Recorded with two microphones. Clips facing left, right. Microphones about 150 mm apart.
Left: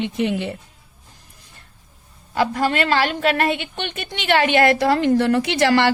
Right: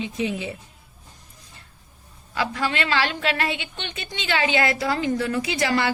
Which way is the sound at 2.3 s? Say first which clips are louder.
Left 6 dB; 45° left (ahead or behind).